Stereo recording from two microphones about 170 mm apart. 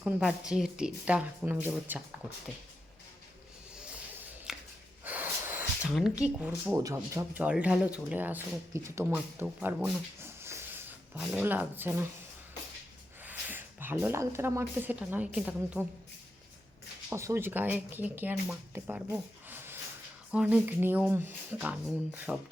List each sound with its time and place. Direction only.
0.0 s speech: 5° right (ahead or behind)
4.5 s a sound: centre (ahead or behind)
5.0 s snort: 10° right (ahead or behind)
5.9 s speech: 5° right (ahead or behind)
6.7 s speech: 20° right (ahead or behind)
10.2 s a sound: 15° right (ahead or behind)
13.2 s a woman's voice: 10° right (ahead or behind)
17.1 s speech: 15° right (ahead or behind)
19.5 s a sound: 15° right (ahead or behind)
20.3 s speech: 5° right (ahead or behind)